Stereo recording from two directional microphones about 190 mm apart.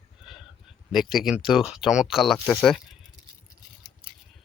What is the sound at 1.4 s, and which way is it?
Speech, centre (ahead or behind).